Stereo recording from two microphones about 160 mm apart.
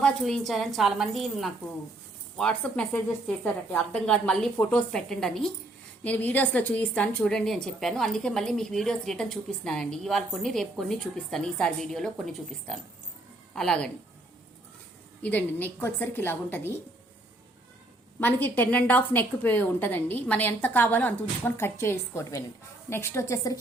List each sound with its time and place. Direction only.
0.0 s a woman's voice: centre (ahead or behind)
15.2 s a woman's voice: 10° left (ahead or behind)
18.2 s a woman's voice: 10° left (ahead or behind)